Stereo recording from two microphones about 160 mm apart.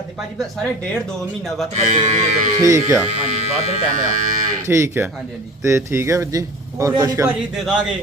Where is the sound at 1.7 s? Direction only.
45° right (ahead or behind).